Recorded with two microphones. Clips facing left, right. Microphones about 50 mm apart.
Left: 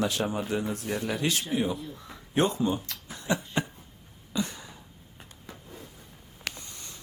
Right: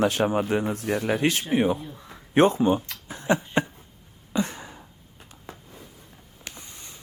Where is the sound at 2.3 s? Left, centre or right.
Right.